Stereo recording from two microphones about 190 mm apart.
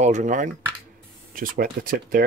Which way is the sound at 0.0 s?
40° right (ahead or behind).